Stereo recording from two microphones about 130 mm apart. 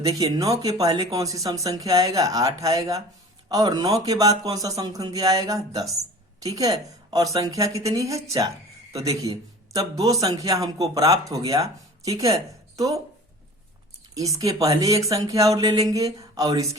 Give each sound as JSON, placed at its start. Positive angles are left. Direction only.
{"t": 0.2, "sound": "a woman's voice", "side_deg": -25}
{"t": 14.2, "sound": "a woman's voice", "side_deg": -25}